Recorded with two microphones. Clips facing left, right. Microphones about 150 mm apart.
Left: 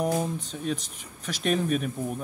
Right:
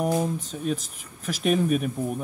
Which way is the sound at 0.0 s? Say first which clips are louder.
Right 2 dB; 5° right (ahead or behind).